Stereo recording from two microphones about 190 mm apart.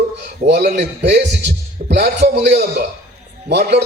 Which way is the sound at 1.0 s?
65° right (ahead or behind).